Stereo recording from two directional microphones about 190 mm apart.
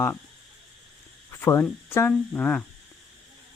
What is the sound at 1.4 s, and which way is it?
Speech, 15° left (ahead or behind).